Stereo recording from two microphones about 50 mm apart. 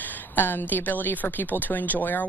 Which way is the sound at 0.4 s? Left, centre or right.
Left.